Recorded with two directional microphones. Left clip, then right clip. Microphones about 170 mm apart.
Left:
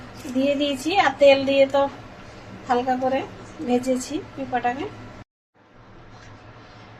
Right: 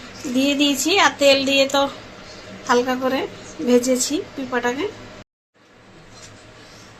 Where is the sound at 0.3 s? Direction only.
60° right (ahead or behind).